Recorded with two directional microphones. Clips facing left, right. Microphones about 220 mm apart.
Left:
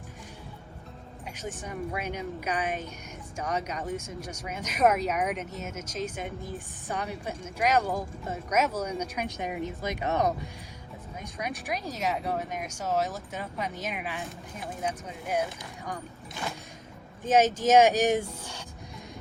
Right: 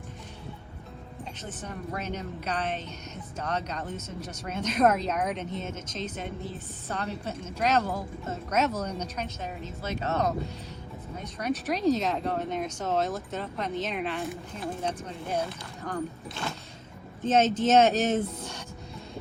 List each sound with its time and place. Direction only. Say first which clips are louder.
1.4 s speech: left 5 dB; 10° left (ahead or behind)
17.2 s speech: even; 10° left (ahead or behind)